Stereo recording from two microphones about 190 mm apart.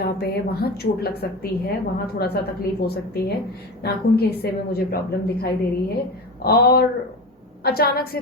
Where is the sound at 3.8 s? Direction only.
55° left (ahead or behind).